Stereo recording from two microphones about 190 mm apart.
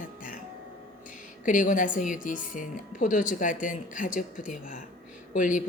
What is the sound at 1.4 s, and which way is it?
A woman's voice, 45° left (ahead or behind).